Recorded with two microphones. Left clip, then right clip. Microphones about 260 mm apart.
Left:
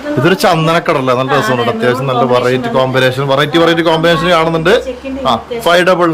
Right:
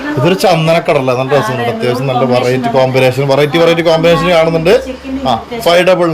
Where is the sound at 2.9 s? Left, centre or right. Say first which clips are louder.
Right 1 dB; left.